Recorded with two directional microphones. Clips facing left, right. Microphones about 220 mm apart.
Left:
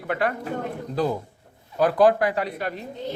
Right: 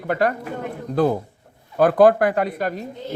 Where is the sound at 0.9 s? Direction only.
55° right (ahead or behind).